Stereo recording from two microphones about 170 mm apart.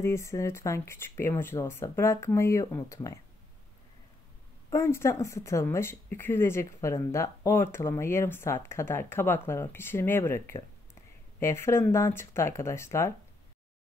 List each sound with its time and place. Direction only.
0.0 s speech: 15° left (ahead or behind)
4.6 s speech: 15° left (ahead or behind)